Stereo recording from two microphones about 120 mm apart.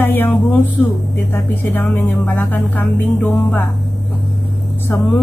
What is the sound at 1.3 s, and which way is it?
A woman's voice, 15° left (ahead or behind).